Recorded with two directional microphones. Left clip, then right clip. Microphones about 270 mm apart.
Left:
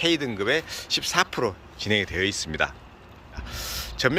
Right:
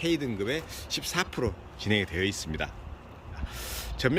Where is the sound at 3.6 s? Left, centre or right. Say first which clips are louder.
Left 5 dB; centre.